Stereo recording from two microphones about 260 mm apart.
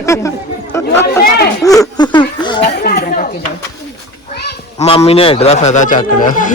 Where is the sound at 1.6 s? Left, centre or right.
Centre.